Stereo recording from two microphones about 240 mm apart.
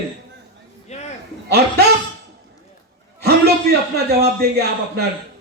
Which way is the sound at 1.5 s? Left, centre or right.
Right.